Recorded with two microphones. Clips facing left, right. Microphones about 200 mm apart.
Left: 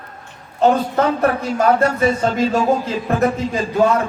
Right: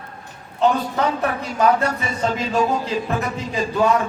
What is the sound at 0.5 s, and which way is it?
A man's voice, 45° left (ahead or behind).